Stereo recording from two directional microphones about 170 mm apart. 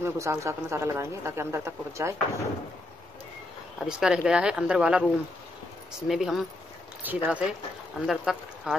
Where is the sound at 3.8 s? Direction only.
5° right (ahead or behind).